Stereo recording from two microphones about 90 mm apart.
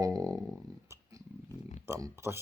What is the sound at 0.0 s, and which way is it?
Dog, 40° right (ahead or behind).